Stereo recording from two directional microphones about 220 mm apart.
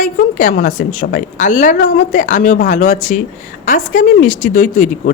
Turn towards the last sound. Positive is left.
turn(degrees=35)  # may be behind; listen again after turning